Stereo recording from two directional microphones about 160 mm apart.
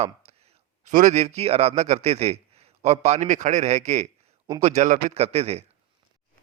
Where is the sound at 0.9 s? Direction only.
50° right (ahead or behind).